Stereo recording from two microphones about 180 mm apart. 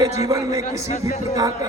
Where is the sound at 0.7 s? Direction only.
40° left (ahead or behind).